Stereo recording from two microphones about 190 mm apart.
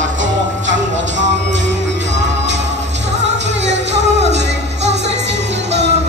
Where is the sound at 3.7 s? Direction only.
65° right (ahead or behind).